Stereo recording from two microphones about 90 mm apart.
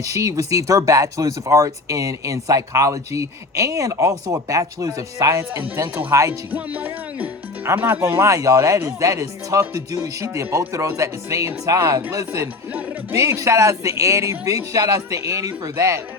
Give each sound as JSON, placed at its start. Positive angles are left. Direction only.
{"t": 0.0, "sound": "speech", "side_deg": -40}
{"t": 8.2, "sound": "speech", "side_deg": -40}